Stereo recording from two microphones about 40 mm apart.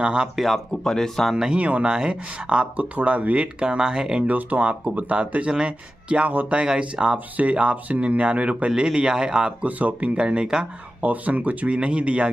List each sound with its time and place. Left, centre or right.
0.0 s speech: right
0.8 s speech: centre
1.3 s speech: right
2.8 s speech: right
3.5 s speech: right
4.3 s speech: right
9.7 s speech: right; by 10.7 s centre
11.0 s speech: right